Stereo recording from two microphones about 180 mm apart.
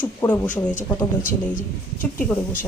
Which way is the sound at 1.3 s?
50° left (ahead or behind).